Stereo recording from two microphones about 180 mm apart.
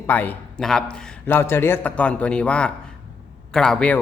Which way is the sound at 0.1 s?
10° left (ahead or behind).